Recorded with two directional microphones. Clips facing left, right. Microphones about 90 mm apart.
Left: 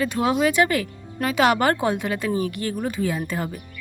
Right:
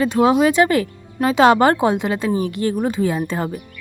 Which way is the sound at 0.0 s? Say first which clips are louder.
Right 6 dB; 30° right (ahead or behind).